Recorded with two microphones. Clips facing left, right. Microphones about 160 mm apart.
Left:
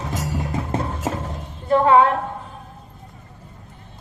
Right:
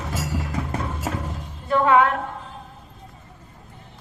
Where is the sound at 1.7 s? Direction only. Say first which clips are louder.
Left 3 dB; 30° left (ahead or behind).